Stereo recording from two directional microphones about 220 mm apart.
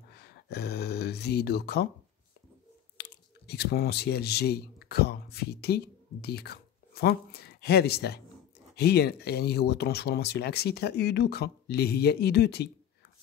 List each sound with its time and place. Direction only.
0.1 s speech: 45° left (ahead or behind)
3.0 s speech: 45° left (ahead or behind)